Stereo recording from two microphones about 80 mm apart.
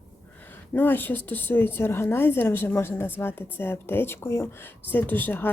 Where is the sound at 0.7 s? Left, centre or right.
Left.